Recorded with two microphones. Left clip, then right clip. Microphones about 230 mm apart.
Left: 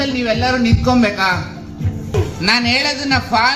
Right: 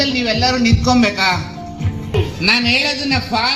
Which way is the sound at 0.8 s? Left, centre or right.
Right.